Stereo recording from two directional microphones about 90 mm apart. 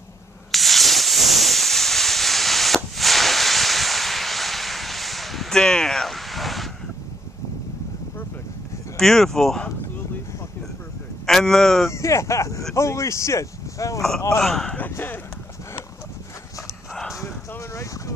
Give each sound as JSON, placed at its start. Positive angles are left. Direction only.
{"t": 0.5, "sound": "hiss", "side_deg": 0}
{"t": 8.9, "sound": "speech", "side_deg": 5}
{"t": 11.2, "sound": "speech", "side_deg": 5}
{"t": 11.9, "sound": "speech", "side_deg": 35}
{"t": 14.4, "sound": "speech", "side_deg": 5}
{"t": 14.8, "sound": "speech", "side_deg": 20}
{"t": 17.1, "sound": "dog", "side_deg": 35}